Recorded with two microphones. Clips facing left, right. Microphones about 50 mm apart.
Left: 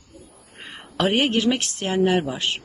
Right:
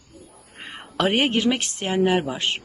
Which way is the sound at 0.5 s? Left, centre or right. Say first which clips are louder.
Right 1 dB; right.